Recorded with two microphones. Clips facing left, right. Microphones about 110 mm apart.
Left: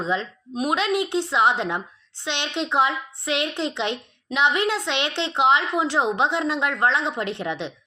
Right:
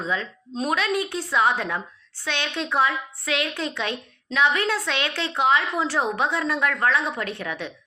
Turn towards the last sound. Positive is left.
turn(degrees=20)  # may be behind; listen again after turning